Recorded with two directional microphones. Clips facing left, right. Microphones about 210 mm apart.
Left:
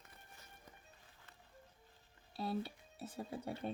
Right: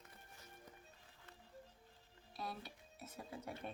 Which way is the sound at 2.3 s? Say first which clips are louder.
Left 8 dB; 30° left (ahead or behind).